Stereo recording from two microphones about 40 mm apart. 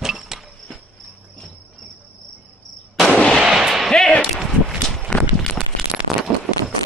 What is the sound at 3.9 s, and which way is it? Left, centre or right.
Whip, centre.